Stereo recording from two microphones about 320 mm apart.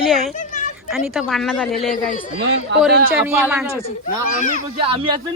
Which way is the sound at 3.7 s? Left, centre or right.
Centre.